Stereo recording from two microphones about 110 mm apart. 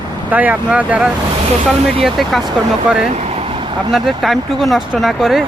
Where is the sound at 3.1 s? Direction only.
80° right; by 3.7 s 55° right (ahead or behind).